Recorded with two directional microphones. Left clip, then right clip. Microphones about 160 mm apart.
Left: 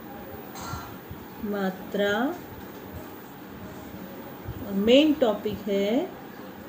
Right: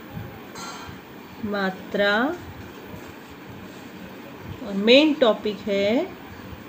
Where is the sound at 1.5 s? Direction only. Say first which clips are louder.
Right 4 dB; 35° right (ahead or behind).